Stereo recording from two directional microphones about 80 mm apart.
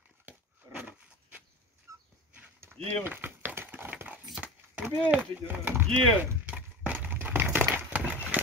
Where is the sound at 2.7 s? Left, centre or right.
Centre.